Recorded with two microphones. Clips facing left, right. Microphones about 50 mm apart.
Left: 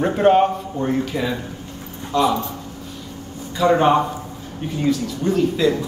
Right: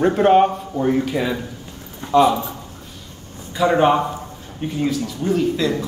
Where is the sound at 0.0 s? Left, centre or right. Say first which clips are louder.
Right 1 dB; centre.